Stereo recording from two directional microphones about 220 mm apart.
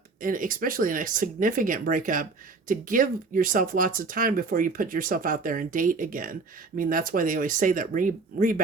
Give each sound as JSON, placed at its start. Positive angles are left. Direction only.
{"t": 0.2, "sound": "speech", "side_deg": -35}